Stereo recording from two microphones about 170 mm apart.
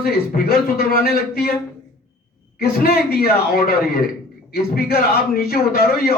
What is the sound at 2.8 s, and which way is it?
A man's voice, 65° left (ahead or behind).